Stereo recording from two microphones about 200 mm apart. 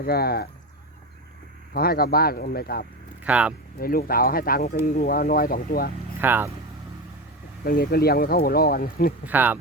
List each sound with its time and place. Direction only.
0.0 s speech: 50° left (ahead or behind)
1.7 s speech: 50° left (ahead or behind)
3.2 s speech: 5° right (ahead or behind)
3.8 s speech: 45° left (ahead or behind)
6.1 s speech: 10° right (ahead or behind)
7.6 s speech: 50° left (ahead or behind)
9.2 s speech: 10° right (ahead or behind)